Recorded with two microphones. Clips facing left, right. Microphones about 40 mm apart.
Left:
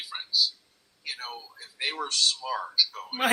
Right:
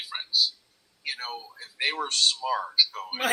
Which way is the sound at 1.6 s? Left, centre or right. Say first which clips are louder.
Right 3 dB; right.